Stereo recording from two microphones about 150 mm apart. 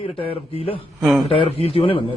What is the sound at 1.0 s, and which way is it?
Speech, centre (ahead or behind).